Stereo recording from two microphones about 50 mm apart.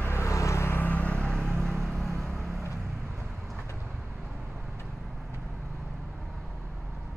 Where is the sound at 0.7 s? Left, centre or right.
Left.